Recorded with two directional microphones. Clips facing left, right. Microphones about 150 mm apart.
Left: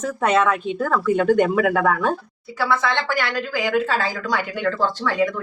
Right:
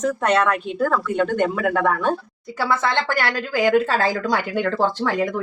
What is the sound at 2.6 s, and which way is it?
A woman's voice, 50° right (ahead or behind).